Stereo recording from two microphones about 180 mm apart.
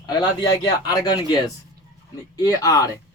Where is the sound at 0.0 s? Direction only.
20° left (ahead or behind).